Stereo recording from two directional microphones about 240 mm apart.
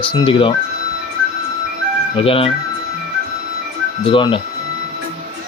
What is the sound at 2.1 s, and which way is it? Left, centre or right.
Speech, left.